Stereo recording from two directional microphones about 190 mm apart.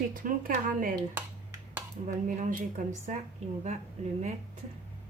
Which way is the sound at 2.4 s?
40° right (ahead or behind).